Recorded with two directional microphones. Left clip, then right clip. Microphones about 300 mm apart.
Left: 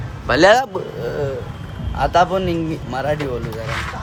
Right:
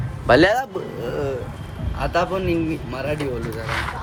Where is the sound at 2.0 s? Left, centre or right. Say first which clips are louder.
Left 6 dB; centre.